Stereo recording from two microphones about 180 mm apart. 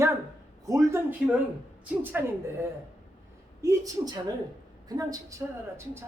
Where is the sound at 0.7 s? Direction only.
15° right (ahead or behind).